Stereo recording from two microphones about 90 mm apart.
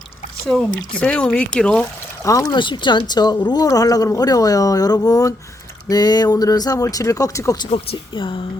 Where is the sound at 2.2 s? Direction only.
40° left (ahead or behind).